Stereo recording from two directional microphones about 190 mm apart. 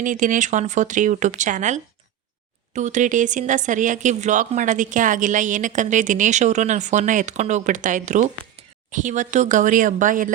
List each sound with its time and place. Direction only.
0.0 s speech: 45° right (ahead or behind)